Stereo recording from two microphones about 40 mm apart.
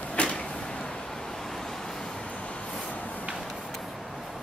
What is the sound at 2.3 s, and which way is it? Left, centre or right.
Train, left.